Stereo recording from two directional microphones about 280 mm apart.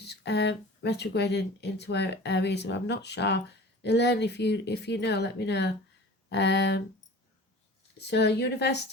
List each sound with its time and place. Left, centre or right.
0.0 s speech: left
7.9 s speech: left